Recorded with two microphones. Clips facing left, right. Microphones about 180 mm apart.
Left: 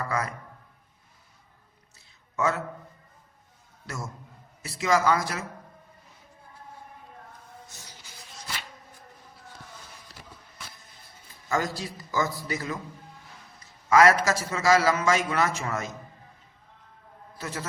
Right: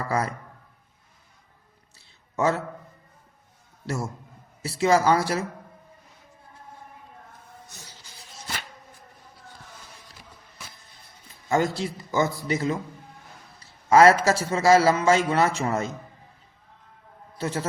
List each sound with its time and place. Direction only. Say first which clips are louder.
0.1 s a man's voice: right 6 dB; 30° right (ahead or behind)
2.0 s a sound: right 3 dB; 30° right (ahead or behind)
3.8 s a man's voice: right 7 dB; 30° right (ahead or behind)
11.4 s a man's voice: right 5 dB; 25° right (ahead or behind)
13.6 s a sound: right 3 dB; 30° right (ahead or behind)
14.3 s a man's voice: right 4 dB; 30° right (ahead or behind)
17.3 s a man's voice: right 7 dB; 30° right (ahead or behind)